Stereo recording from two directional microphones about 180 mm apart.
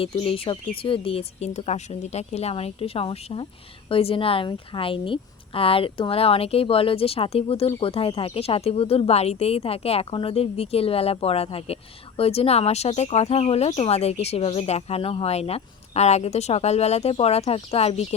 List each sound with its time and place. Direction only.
0.0 s speech: 30° left (ahead or behind)